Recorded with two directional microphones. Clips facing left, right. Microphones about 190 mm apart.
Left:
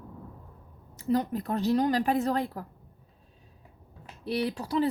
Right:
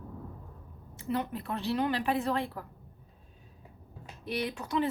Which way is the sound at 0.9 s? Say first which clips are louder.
Left 6 dB; 40° left (ahead or behind).